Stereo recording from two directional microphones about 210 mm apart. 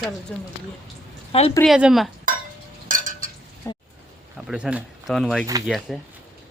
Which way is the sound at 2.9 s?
40° right (ahead or behind).